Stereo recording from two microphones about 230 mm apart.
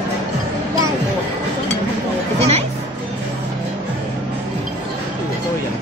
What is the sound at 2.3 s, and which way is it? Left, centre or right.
Music, right.